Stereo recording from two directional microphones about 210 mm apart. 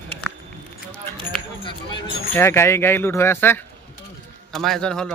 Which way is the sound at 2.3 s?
10° left (ahead or behind).